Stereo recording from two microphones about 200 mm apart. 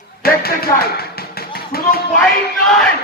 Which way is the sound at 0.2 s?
50° left (ahead or behind).